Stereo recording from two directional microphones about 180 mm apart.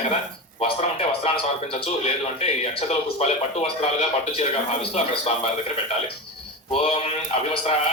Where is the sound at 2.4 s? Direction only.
35° left (ahead or behind).